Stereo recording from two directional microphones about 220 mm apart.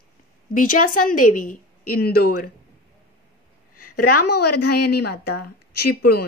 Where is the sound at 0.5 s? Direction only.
40° left (ahead or behind).